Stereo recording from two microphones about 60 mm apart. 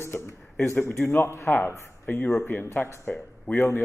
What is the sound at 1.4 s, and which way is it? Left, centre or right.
Speech, left.